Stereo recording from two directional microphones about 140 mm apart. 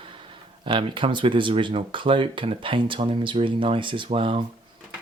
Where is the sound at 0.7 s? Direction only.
35° right (ahead or behind).